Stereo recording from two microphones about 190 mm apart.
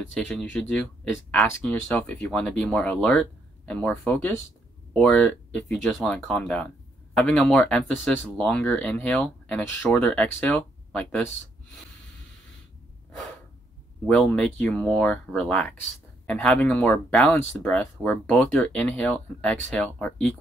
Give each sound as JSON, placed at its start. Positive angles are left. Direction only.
{"t": 0.1, "sound": "speech", "side_deg": 5}
{"t": 14.0, "sound": "speech", "side_deg": 5}